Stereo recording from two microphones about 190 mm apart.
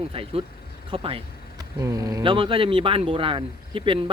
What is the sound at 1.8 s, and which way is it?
Speech, 20° right (ahead or behind).